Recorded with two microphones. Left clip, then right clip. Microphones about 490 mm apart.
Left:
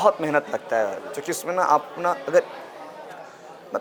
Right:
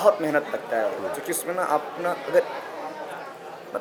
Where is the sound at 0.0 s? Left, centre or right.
Left.